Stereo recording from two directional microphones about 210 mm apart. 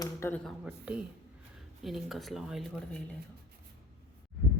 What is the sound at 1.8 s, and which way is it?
Speech, centre (ahead or behind).